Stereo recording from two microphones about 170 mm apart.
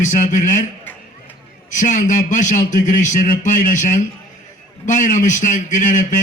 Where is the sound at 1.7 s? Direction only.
45° left (ahead or behind).